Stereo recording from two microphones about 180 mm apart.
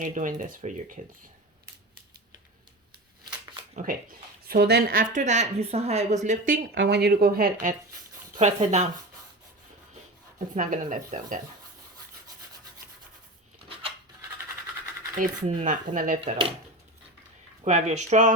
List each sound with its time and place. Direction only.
0.0 s speech: 45° right (ahead or behind)
4.4 s a woman's voice: 60° right (ahead or behind); by 6.6 s 45° right (ahead or behind)
6.7 s speech: 70° right (ahead or behind); by 7.8 s 50° right (ahead or behind)
8.4 s a woman's voice: 40° right (ahead or behind)
10.5 s speech: 45° right (ahead or behind)
15.2 s speech: 45° right (ahead or behind)
16.2 s speech: 30° right (ahead or behind)
17.7 s a woman's voice: 40° right (ahead or behind)